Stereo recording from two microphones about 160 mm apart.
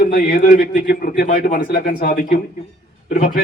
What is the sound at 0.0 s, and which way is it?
A man's voice, 65° left (ahead or behind).